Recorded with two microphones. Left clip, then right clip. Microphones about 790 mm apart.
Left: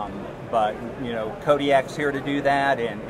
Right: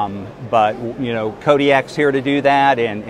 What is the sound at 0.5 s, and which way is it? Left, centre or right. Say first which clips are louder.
Speech: right 8 dB; right.